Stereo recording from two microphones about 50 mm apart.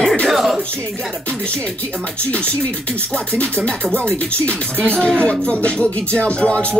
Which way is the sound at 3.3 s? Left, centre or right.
Left.